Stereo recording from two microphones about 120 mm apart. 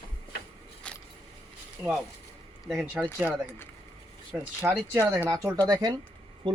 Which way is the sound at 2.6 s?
Centre (ahead or behind).